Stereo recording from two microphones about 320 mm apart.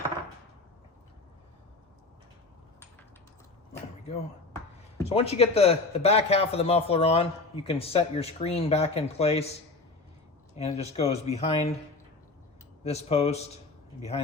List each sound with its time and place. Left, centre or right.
5.0 s a man's voice: centre
10.6 s a man's voice: centre
12.8 s a man's voice: centre